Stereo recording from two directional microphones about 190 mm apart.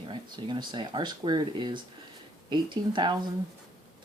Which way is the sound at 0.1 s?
25° right (ahead or behind).